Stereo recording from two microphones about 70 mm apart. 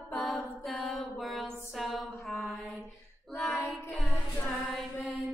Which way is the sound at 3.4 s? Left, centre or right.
Centre.